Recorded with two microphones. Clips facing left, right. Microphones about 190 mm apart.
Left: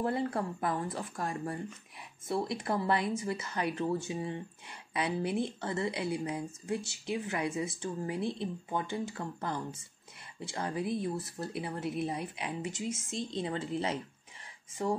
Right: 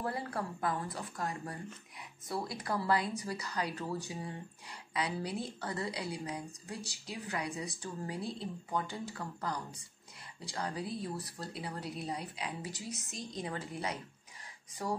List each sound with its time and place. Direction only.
0.0 s speech: 25° left (ahead or behind)